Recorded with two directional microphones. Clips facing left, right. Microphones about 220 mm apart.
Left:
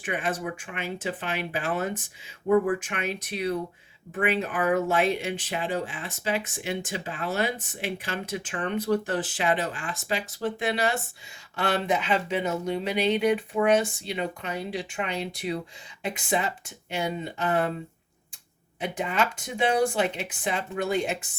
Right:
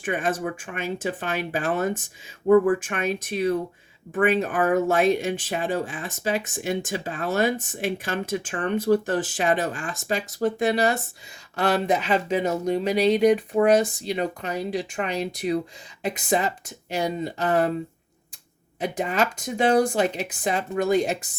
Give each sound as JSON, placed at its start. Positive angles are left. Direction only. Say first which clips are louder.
{"t": 0.0, "sound": "speech", "louder": "right 4 dB", "side_deg": -45}
{"t": 18.8, "sound": "speech", "louder": "right 3 dB", "side_deg": -40}